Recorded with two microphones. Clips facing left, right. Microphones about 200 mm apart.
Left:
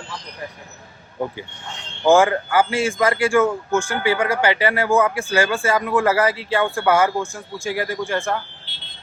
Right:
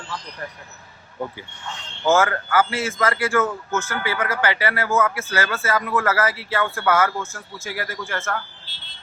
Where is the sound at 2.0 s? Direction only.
15° left (ahead or behind).